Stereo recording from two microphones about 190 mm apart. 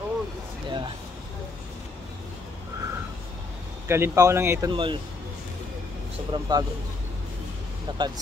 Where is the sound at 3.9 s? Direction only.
15° right (ahead or behind).